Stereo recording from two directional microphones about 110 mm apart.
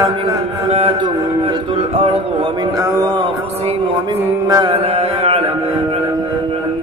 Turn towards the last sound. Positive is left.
turn(degrees=-65)  # may be behind; listen again after turning